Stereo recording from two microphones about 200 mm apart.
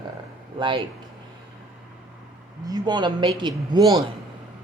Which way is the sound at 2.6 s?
20° right (ahead or behind).